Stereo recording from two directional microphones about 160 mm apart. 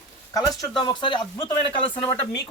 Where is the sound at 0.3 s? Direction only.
25° left (ahead or behind).